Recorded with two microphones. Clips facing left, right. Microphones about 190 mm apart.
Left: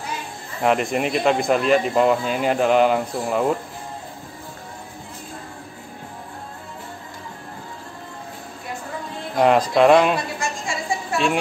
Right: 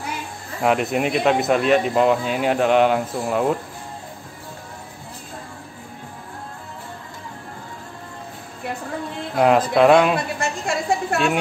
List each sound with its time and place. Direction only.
0.6 s speech: centre (ahead or behind)
9.4 s speech: centre (ahead or behind)
10.1 s a sound: 60° right (ahead or behind)